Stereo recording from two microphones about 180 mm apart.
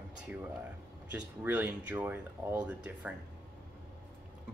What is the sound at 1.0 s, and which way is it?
Speech, 10° right (ahead or behind).